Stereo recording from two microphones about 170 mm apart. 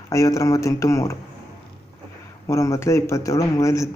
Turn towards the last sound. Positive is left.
turn(degrees=20)  # may be behind; listen again after turning